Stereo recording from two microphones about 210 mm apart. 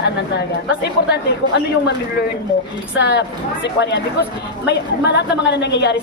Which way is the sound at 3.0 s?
55° left (ahead or behind).